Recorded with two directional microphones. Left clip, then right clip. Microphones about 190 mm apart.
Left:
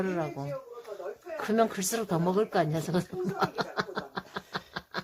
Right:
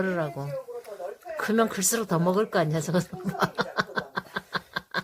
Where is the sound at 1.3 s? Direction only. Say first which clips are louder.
Right 2 dB; 15° right (ahead or behind).